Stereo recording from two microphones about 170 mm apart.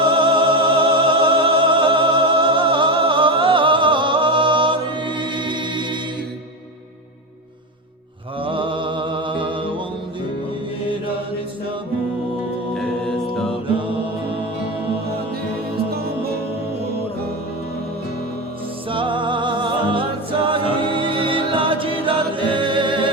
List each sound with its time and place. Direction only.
0.0 s music: 30° right (ahead or behind)
8.4 s music: 30° right (ahead or behind)
12.7 s music: centre (ahead or behind)
18.9 s music: 30° right (ahead or behind)